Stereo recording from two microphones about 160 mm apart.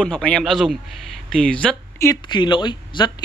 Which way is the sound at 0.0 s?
5° left (ahead or behind).